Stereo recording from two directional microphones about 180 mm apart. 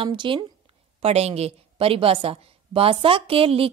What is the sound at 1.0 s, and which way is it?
A woman's voice, 35° right (ahead or behind).